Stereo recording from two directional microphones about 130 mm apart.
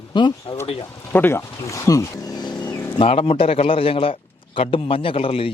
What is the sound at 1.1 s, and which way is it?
A man's voice, 15° left (ahead or behind).